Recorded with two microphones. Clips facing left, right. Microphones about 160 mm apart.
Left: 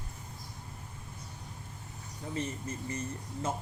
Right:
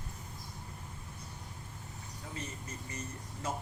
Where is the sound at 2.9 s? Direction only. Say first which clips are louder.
Left 6 dB; 25° left (ahead or behind).